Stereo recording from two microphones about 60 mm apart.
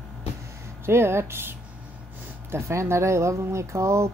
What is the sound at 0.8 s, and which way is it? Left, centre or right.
Speech, right.